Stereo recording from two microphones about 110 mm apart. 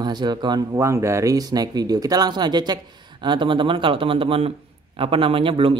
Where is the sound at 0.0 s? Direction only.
40° right (ahead or behind).